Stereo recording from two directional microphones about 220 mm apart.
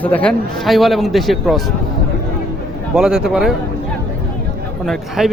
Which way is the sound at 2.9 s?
Centre (ahead or behind).